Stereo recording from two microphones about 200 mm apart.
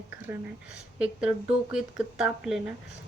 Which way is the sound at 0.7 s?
5° right (ahead or behind).